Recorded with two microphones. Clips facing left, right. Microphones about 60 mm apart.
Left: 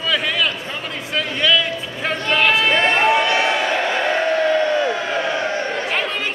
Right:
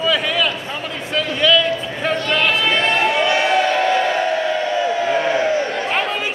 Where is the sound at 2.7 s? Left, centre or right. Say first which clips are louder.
Left 1 dB; left.